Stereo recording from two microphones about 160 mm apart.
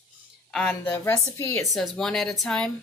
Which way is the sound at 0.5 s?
10° left (ahead or behind).